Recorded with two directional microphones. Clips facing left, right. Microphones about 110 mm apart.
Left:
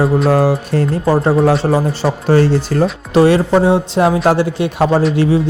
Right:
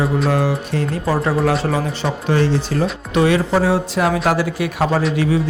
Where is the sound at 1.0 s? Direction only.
30° left (ahead or behind).